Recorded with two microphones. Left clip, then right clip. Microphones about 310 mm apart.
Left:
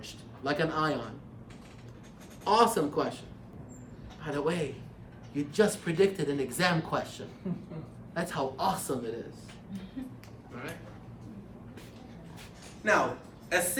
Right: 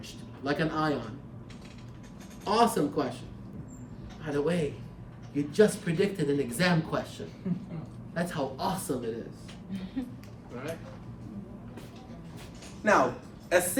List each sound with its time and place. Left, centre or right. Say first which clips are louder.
0.0 s a man's voice: even; centre
2.4 s speech: left 1 dB; centre
4.2 s speech: right 2 dB; centre
8.1 s speech: even; centre
12.8 s speech: right 2 dB; centre